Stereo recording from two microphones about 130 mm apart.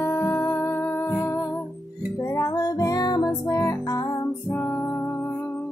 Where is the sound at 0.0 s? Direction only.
20° left (ahead or behind).